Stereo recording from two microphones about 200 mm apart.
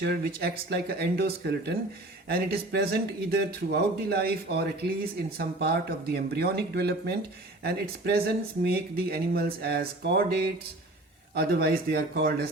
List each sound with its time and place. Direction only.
0.0 s speech: 50° right (ahead or behind)